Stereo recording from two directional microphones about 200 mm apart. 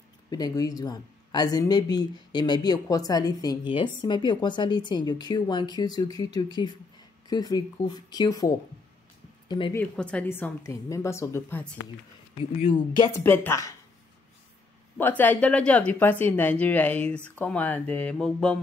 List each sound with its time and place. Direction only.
0.3 s speech: 20° left (ahead or behind)
9.8 s speech: 5° left (ahead or behind)
12.6 s speech: 25° left (ahead or behind)
13.2 s speech: 10° left (ahead or behind)
15.0 s speech: 10° left (ahead or behind)